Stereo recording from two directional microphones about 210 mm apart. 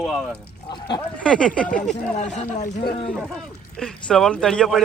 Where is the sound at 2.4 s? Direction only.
35° left (ahead or behind).